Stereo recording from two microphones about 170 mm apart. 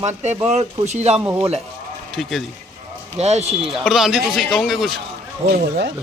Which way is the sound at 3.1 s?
40° right (ahead or behind).